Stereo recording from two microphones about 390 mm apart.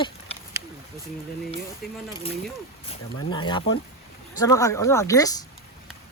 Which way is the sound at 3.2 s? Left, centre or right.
Centre.